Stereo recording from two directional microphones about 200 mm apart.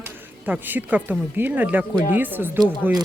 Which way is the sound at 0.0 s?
10° right (ahead or behind).